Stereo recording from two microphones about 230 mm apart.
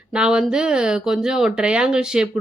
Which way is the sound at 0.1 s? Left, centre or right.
Centre.